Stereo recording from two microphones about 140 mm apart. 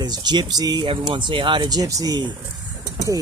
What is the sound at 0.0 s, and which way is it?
Speech, 30° right (ahead or behind).